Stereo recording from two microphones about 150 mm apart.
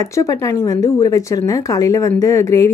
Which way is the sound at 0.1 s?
20° left (ahead or behind).